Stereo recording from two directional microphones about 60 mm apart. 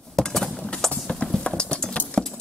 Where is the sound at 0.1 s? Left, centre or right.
Centre.